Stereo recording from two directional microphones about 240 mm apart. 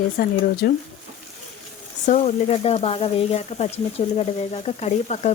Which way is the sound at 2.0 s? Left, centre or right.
Left.